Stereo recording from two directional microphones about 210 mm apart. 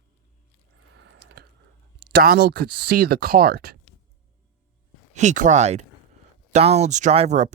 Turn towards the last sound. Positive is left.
turn(degrees=-35)  # may be behind; listen again after turning